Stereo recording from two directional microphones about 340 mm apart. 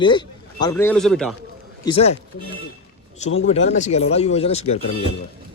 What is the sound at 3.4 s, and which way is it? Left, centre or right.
Speech, centre.